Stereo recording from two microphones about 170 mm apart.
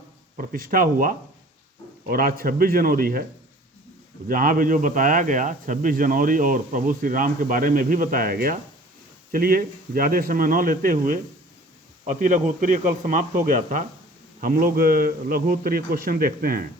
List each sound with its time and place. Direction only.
0.3 s a man's voice: 55° right (ahead or behind)
4.3 s a man's voice: 55° right (ahead or behind)